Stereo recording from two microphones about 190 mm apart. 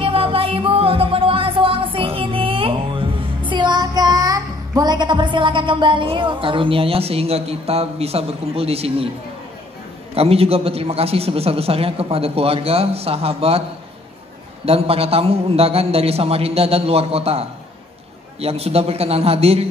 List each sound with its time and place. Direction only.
0.0 s music: 30° right (ahead or behind)
10.1 s a man's voice: 30° right (ahead or behind)